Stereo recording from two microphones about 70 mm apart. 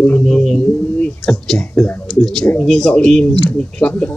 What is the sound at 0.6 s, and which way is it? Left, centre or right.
Speech, left.